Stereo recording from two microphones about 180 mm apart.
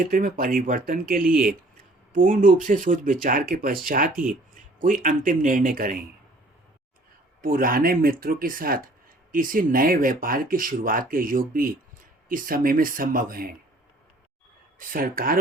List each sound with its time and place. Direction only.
0.0 s a man's voice: 50° right (ahead or behind)
7.4 s speech: 50° right (ahead or behind)
14.8 s speech: 50° right (ahead or behind)